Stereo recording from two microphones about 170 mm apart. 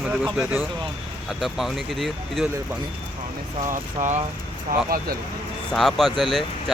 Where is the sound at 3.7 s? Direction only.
45° right (ahead or behind).